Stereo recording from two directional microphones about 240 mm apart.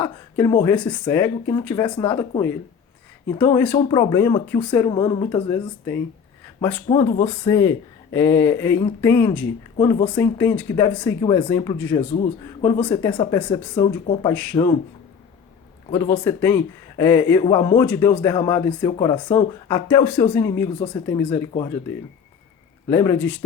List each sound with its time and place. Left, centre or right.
0.0 s speech: centre
3.2 s speech: centre
6.8 s speech: centre
13.7 s speech: centre
15.9 s speech: centre
22.9 s speech: centre